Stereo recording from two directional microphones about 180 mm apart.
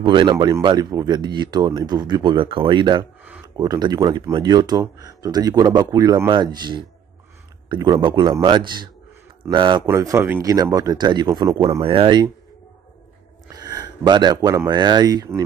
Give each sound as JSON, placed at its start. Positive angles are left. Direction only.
{"t": 0.0, "sound": "speech", "side_deg": -25}
{"t": 9.8, "sound": "speech", "side_deg": -15}
{"t": 13.5, "sound": "speech", "side_deg": -20}